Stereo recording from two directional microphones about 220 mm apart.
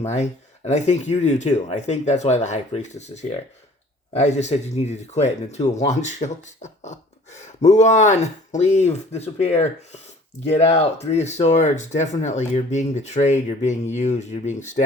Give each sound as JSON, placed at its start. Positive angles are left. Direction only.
{"t": 0.0, "sound": "speech", "side_deg": 30}
{"t": 11.0, "sound": "speech", "side_deg": 30}